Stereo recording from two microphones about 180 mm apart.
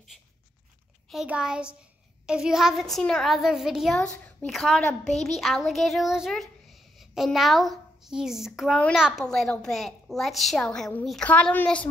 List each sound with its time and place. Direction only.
1.1 s a child's voice: 5° right (ahead or behind)